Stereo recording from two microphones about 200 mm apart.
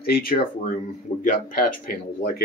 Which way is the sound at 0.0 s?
50° left (ahead or behind).